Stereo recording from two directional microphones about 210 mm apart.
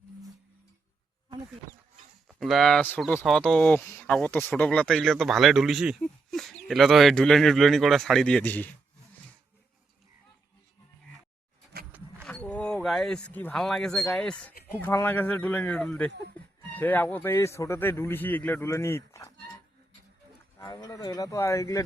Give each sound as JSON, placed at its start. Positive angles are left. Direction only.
{"t": 2.2, "sound": "speech", "side_deg": 0}
{"t": 11.9, "sound": "wild animals", "side_deg": -10}
{"t": 12.2, "sound": "speech", "side_deg": 5}
{"t": 20.6, "sound": "speech", "side_deg": 15}